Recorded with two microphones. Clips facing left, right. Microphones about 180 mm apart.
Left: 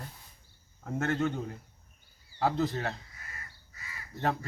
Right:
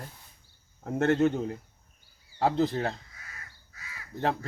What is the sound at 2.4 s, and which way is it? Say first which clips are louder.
Speech: right 3 dB; 30° right (ahead or behind).